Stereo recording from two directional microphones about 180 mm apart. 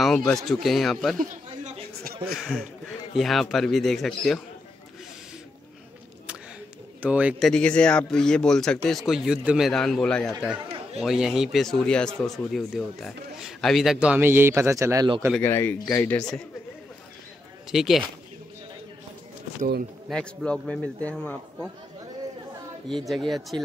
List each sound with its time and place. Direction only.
0.0 s speech: 5° left (ahead or behind)
1.1 s chatter: 45° right (ahead or behind)
2.3 s speech: 5° left (ahead or behind)
7.0 s speech: 5° right (ahead or behind)
15.4 s speech: 10° left (ahead or behind)
17.6 s speech: centre (ahead or behind)
20.1 s speech: 5° left (ahead or behind)
23.0 s speech: centre (ahead or behind)